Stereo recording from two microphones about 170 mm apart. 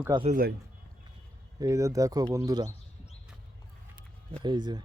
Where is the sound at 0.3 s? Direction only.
60° right (ahead or behind).